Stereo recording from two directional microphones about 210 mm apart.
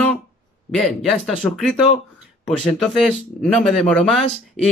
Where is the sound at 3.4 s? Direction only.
Centre (ahead or behind).